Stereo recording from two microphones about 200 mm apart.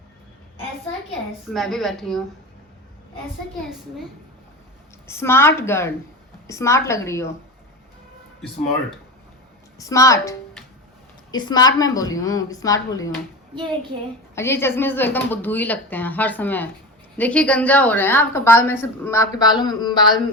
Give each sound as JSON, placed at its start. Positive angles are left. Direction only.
{"t": 1.5, "sound": "a woman's voice", "side_deg": 0}
{"t": 5.0, "sound": "a woman's voice", "side_deg": 10}
{"t": 9.7, "sound": "a woman's voice", "side_deg": 15}
{"t": 14.3, "sound": "a woman's voice", "side_deg": 10}